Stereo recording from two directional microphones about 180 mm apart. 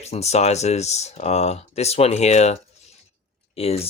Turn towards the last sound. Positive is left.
turn(degrees=35)  # may be behind; listen again after turning